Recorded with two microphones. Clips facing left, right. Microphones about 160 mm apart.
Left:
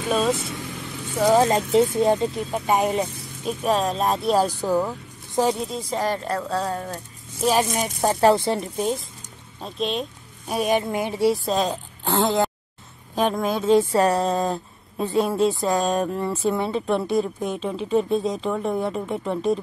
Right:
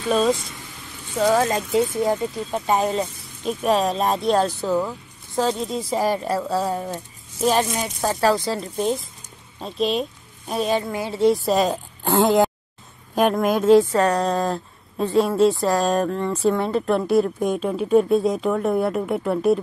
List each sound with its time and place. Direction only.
0.1 s a woman's voice: 5° left (ahead or behind)
1.1 s speech: 15° left (ahead or behind)
2.5 s speech: 10° left (ahead or behind)
3.4 s a woman's voice: centre (ahead or behind)
5.7 s speech: centre (ahead or behind)
7.7 s speech: 20° left (ahead or behind)
8.7 s a woman's voice: centre (ahead or behind)
9.6 s a sound: centre (ahead or behind)
10.5 s speech: 15° left (ahead or behind)
11.3 s speech: 5° right (ahead or behind)
13.9 s a woman's voice: 5° left (ahead or behind)
17.4 s speech: 10° right (ahead or behind)